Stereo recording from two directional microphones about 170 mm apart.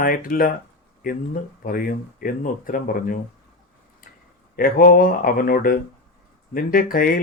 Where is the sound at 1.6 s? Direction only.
60° left (ahead or behind).